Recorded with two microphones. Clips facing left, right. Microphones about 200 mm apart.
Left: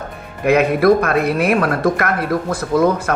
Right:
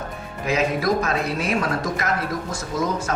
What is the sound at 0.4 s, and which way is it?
Speech, 60° left (ahead or behind).